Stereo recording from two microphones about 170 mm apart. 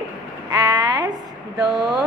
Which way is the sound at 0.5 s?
25° right (ahead or behind).